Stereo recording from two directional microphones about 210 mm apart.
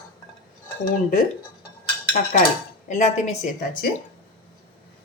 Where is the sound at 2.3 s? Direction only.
35° left (ahead or behind).